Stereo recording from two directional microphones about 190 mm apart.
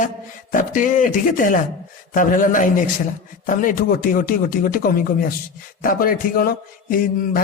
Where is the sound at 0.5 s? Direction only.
45° left (ahead or behind).